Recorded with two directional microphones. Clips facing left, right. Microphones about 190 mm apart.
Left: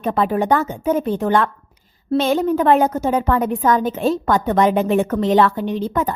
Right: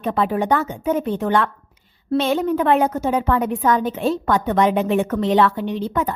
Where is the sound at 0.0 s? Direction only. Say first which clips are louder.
Left 2 dB; 45° left (ahead or behind).